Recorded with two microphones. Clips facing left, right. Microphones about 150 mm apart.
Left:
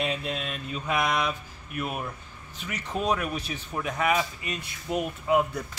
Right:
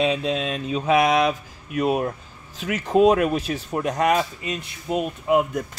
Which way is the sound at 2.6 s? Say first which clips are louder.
Right 10 dB; 90° right.